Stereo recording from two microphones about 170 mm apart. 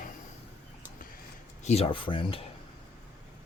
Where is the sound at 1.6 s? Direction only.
35° left (ahead or behind).